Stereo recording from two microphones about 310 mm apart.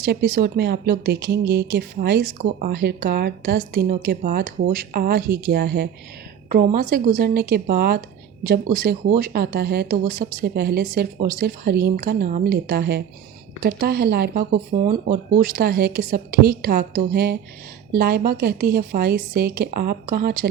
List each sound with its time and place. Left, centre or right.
0.0 s a woman's voice: right